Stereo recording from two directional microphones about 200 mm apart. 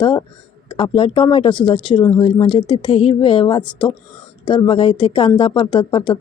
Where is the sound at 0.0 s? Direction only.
25° left (ahead or behind).